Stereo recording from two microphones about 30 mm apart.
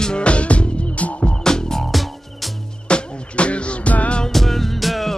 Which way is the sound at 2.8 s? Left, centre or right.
Left.